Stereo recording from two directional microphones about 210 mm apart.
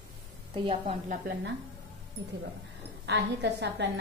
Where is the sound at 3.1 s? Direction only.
55° right (ahead or behind).